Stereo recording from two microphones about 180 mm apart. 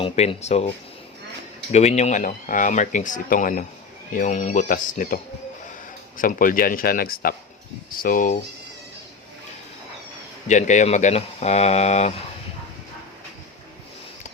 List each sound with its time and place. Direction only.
0.0 s speech: 35° left (ahead or behind)
1.7 s speech: 40° left (ahead or behind)
10.5 s speech: 40° left (ahead or behind)